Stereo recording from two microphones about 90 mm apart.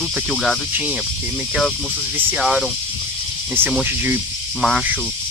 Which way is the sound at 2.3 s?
10° right (ahead or behind).